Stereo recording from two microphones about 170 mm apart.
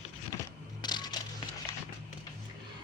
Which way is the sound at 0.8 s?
25° left (ahead or behind).